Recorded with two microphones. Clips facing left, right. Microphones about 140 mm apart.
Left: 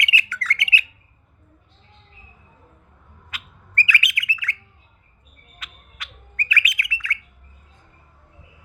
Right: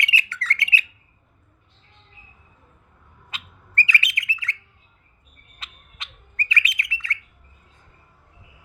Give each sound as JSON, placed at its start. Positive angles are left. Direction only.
{"t": 0.0, "sound": "bird", "side_deg": -30}
{"t": 3.2, "sound": "bird", "side_deg": -30}
{"t": 5.5, "sound": "bird", "side_deg": -30}